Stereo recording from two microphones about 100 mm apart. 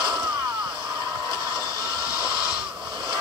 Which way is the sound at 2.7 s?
10° right (ahead or behind).